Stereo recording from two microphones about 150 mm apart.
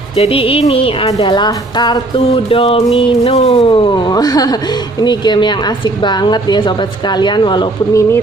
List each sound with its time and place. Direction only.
0.2 s speech: 40° left (ahead or behind)